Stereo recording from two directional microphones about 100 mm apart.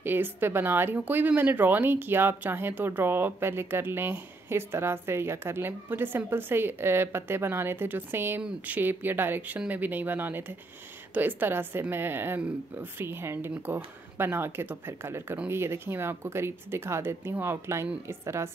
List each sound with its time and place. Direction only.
0.0 s speech: 20° right (ahead or behind)